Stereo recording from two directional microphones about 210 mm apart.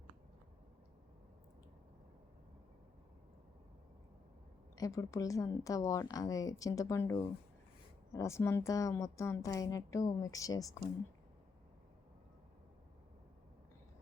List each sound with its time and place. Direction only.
4.8 s a woman's voice: 15° left (ahead or behind)